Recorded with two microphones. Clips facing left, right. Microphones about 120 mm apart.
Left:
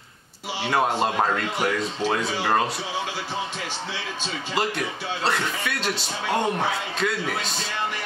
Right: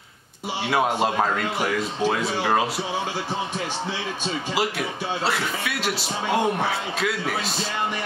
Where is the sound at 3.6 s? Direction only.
50° right (ahead or behind).